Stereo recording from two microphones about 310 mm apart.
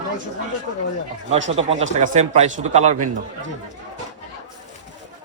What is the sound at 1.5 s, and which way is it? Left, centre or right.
Speech, right.